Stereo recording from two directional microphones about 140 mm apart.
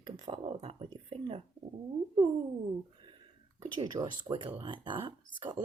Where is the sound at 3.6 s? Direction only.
30° right (ahead or behind).